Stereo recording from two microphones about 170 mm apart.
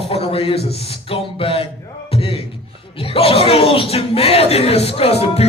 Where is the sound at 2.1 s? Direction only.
35° left (ahead or behind).